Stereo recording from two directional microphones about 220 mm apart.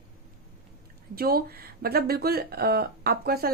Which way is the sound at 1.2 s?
45° right (ahead or behind).